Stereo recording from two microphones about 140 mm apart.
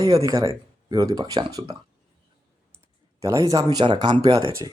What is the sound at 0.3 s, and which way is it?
Speech, 25° right (ahead or behind).